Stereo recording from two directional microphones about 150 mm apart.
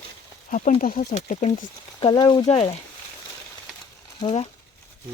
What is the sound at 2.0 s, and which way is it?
Speech, 30° left (ahead or behind).